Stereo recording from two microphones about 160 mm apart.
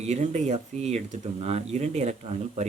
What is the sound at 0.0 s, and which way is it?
Speech, 45° right (ahead or behind).